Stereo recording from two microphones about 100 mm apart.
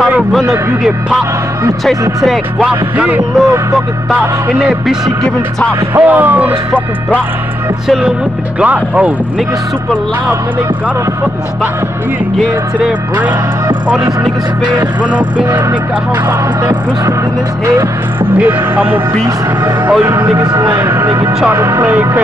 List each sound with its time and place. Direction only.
0.3 s speech: 5° right (ahead or behind)
2.6 s speech: 10° right (ahead or behind)
5.9 s speech: 20° right (ahead or behind)
8.5 s speech: 15° right (ahead or behind)
13.2 s speech: 15° right (ahead or behind)
15.0 s speech: 15° right (ahead or behind)
20.2 s speech: 40° right (ahead or behind)
21.8 s speech: 15° right (ahead or behind)